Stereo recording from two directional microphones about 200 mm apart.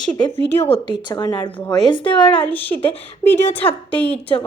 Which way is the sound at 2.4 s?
10° left (ahead or behind).